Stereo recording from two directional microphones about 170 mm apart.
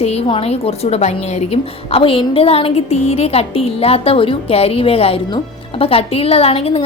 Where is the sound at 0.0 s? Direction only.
35° left (ahead or behind).